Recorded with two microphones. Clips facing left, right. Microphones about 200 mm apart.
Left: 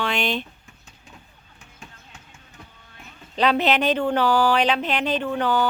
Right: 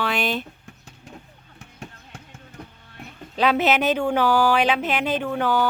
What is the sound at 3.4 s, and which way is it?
Speech, 5° right (ahead or behind).